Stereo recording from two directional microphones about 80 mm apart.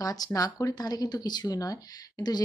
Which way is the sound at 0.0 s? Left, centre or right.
Left.